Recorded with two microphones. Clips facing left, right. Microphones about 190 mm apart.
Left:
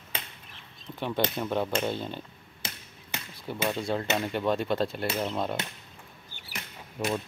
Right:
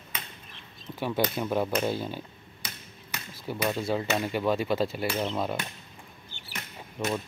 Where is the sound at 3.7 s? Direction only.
5° right (ahead or behind).